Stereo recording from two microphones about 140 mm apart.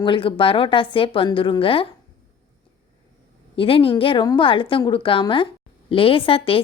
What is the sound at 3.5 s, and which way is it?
A woman's voice, 40° left (ahead or behind).